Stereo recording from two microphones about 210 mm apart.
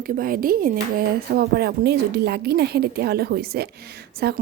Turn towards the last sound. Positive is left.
turn(degrees=-50)  # may be behind; listen again after turning